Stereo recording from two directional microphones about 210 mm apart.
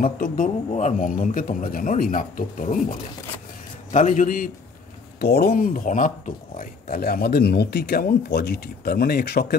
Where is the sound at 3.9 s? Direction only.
35° left (ahead or behind).